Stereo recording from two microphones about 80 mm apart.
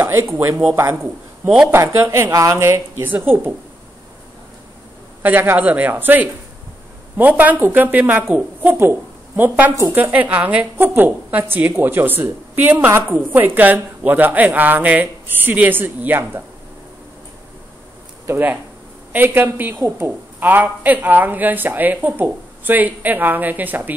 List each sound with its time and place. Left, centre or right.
0.0 s a woman's voice: right
5.2 s a woman's voice: right
18.2 s a woman's voice: right